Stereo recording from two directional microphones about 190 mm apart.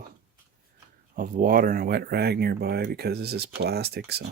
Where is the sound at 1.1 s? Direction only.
45° right (ahead or behind).